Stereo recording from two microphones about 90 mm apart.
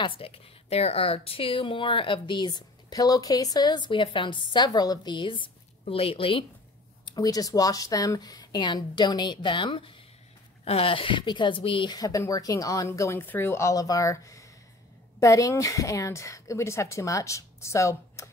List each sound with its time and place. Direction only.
0.0 s speech: 80° left
7.1 s speech: 45° left (ahead or behind); by 9.9 s 70° left (ahead or behind)
10.7 s a woman's voice: 90° left; by 11.9 s 75° left (ahead or behind)
11.9 s a woman's voice: 40° left (ahead or behind)